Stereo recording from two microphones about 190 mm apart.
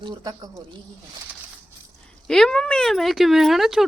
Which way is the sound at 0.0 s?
20° right (ahead or behind).